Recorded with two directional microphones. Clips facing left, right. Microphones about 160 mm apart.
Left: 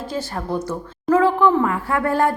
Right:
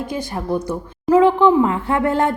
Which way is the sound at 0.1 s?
15° right (ahead or behind).